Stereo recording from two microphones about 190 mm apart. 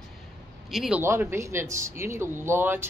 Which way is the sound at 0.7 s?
5° right (ahead or behind).